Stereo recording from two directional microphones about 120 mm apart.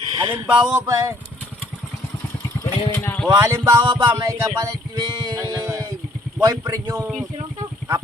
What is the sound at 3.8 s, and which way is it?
Music, 35° right (ahead or behind).